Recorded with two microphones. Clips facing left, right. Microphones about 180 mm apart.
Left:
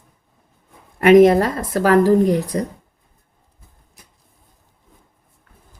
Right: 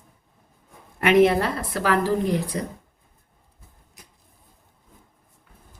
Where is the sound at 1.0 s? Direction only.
40° left (ahead or behind).